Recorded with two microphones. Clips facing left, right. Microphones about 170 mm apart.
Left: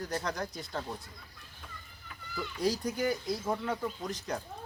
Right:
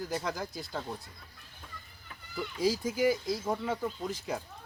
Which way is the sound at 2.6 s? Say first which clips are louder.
Right 3 dB; centre (ahead or behind).